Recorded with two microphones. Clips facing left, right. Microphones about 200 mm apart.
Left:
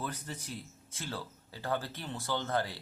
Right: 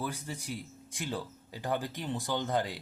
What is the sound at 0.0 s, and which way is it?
Speech, 10° right (ahead or behind).